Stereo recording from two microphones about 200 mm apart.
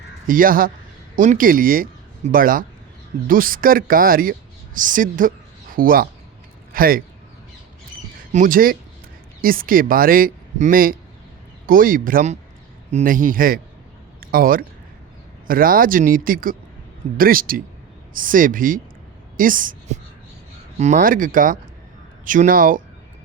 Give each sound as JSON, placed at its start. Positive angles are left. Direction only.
{"t": 0.3, "sound": "speech", "side_deg": -45}
{"t": 8.3, "sound": "speech", "side_deg": -40}
{"t": 14.2, "sound": "a sound", "side_deg": -45}
{"t": 15.4, "sound": "a woman's voice", "side_deg": -45}